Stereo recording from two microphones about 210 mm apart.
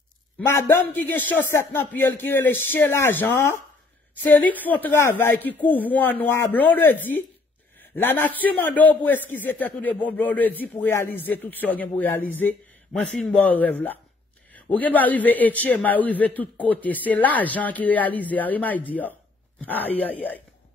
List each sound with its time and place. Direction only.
0.5 s a man's voice: 10° left (ahead or behind)